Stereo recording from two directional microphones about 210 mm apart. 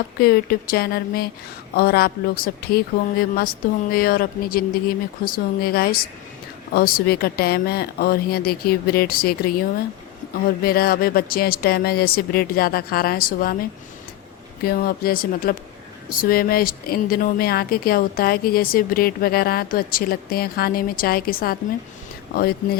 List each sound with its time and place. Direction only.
0.2 s speech: 45° left (ahead or behind)
10.6 s speech: 45° left (ahead or behind)
14.6 s speech: 45° left (ahead or behind)